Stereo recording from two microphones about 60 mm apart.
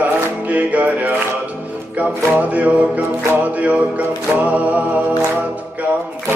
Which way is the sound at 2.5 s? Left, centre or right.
Right.